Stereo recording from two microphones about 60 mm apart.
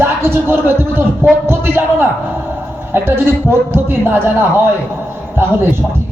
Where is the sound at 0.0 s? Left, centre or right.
Right.